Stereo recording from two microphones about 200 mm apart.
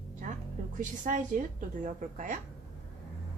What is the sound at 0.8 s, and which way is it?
Speech, 40° right (ahead or behind).